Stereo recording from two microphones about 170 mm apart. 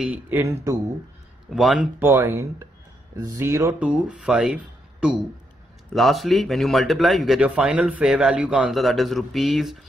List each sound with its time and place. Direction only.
0.0 s speech: 10° right (ahead or behind)
1.5 s speech: centre (ahead or behind)
2.0 s speech: 15° right (ahead or behind)
5.9 s speech: centre (ahead or behind)